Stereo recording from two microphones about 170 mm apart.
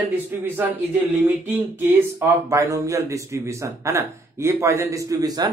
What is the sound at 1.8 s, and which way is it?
Speech, 15° right (ahead or behind).